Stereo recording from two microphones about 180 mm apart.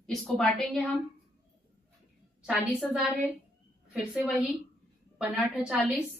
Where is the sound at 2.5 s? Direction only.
5° right (ahead or behind).